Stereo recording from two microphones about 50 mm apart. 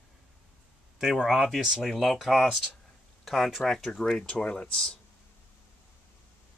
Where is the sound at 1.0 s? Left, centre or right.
Centre.